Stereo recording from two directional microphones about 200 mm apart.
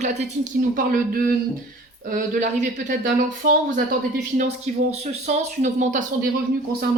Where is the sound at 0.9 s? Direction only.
45° right (ahead or behind).